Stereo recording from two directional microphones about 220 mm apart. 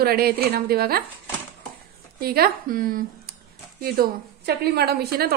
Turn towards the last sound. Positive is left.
turn(degrees=-45)  # may be behind; listen again after turning